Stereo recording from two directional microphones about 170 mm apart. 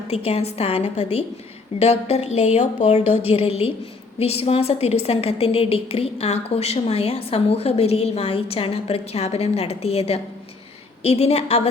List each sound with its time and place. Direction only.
0.1 s a woman's voice: 35° left (ahead or behind)